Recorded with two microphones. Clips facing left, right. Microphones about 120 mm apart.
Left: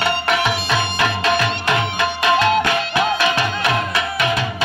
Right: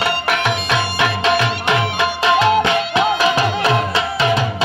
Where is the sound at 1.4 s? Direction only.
15° right (ahead or behind).